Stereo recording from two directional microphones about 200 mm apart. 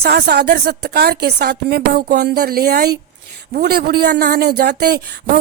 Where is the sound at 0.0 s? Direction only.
50° right (ahead or behind).